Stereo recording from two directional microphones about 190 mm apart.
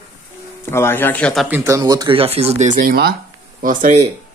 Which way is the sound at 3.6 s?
45° right (ahead or behind).